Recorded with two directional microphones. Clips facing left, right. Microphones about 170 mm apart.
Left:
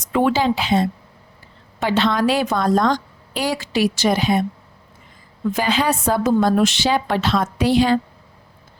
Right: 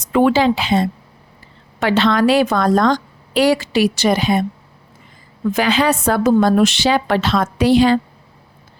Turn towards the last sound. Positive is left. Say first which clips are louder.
# right 4 dB
turn(degrees=-80)